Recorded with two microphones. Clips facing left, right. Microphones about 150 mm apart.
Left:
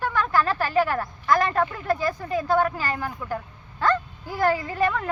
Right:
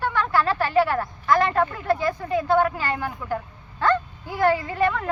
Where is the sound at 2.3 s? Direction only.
15° right (ahead or behind).